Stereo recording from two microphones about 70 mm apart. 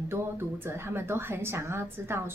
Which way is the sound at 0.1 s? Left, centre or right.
Right.